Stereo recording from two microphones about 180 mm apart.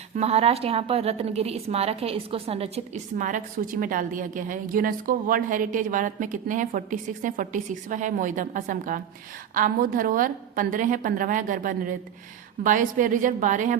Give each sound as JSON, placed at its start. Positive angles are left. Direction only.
{"t": 0.2, "sound": "a woman's voice", "side_deg": -35}